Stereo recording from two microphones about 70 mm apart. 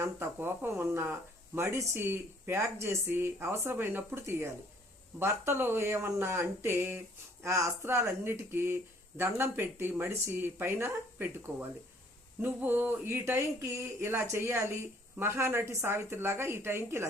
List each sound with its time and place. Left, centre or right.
0.0 s speech: right
7.4 s speech: right